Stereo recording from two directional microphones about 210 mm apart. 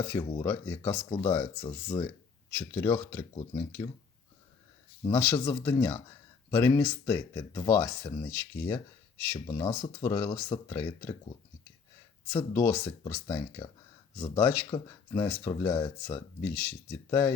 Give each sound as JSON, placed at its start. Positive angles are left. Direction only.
{"t": 0.4, "sound": "speech", "side_deg": 15}
{"t": 5.0, "sound": "speech", "side_deg": 10}
{"t": 12.3, "sound": "speech", "side_deg": 15}